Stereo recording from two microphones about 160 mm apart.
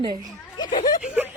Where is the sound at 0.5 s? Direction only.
25° left (ahead or behind).